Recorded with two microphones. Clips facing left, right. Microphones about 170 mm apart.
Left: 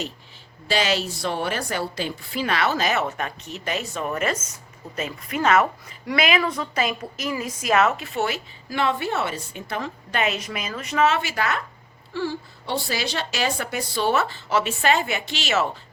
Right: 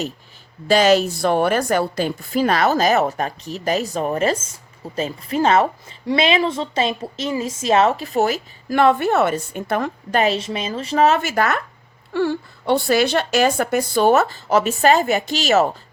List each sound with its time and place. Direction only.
0.7 s a woman's voice: 45° right (ahead or behind)
10.2 s a woman's voice: 30° right (ahead or behind); by 11.6 s 50° right (ahead or behind)
12.1 s speech: 60° right (ahead or behind); by 15.7 s 40° right (ahead or behind)